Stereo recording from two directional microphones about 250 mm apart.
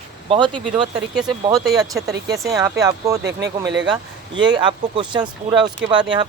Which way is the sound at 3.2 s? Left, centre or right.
Right.